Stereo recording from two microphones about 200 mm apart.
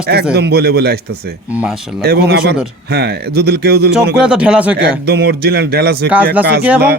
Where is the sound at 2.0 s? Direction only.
55° right (ahead or behind).